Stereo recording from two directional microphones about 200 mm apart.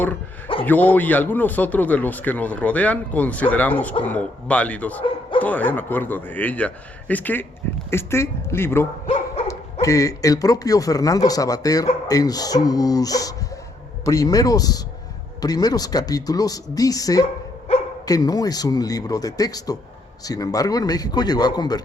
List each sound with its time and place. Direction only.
0.6 s speech: 10° left (ahead or behind)
17.7 s dog: 30° left (ahead or behind)
18.0 s speech: 20° left (ahead or behind)